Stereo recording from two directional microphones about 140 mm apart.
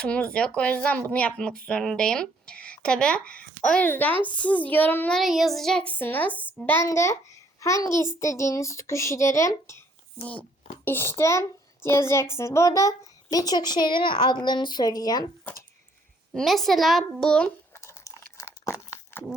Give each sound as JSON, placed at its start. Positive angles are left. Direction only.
{"t": 0.0, "sound": "speech", "side_deg": 5}
{"t": 5.1, "sound": "a child's voice", "side_deg": 0}
{"t": 10.8, "sound": "a child's voice", "side_deg": 15}
{"t": 16.3, "sound": "a woman's voice", "side_deg": 0}
{"t": 17.7, "sound": "a sound", "side_deg": 20}